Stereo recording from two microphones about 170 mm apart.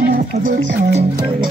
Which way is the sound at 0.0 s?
60° right (ahead or behind).